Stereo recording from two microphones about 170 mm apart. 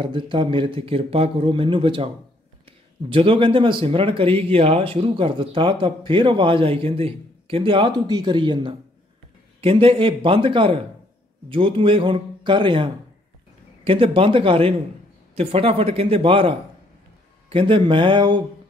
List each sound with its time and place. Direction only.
0.0 s speech: 30° right (ahead or behind)
3.1 s speech: 30° right (ahead or behind)